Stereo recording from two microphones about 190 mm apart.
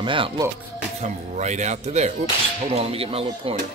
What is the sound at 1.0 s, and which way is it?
Speech, 35° right (ahead or behind).